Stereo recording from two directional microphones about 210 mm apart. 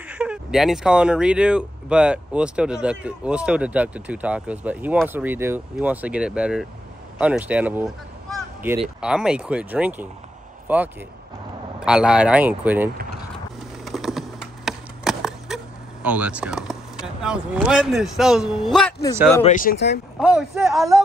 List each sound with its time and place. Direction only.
0.1 s speech: 5° right (ahead or behind)
13.8 s a sound: centre (ahead or behind)
19.4 s speech: 40° left (ahead or behind)
20.2 s speech: 5° right (ahead or behind)